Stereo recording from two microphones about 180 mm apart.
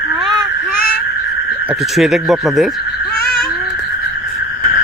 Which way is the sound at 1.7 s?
Centre (ahead or behind).